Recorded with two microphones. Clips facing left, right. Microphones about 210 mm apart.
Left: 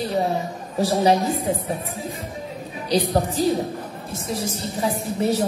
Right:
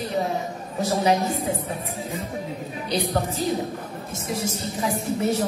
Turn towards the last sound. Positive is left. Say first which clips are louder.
# left 1 dB
turn(degrees=35)  # may be behind; listen again after turning